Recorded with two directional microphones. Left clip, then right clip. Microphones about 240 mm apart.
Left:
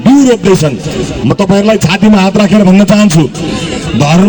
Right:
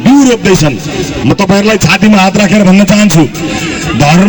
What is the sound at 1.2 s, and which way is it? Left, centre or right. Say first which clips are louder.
A man's voice: even; right.